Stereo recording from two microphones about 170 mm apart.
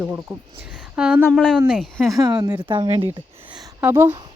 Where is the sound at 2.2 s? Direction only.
20° right (ahead or behind).